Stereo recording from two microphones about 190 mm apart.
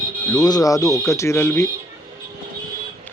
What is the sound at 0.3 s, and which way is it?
Speech, 20° left (ahead or behind).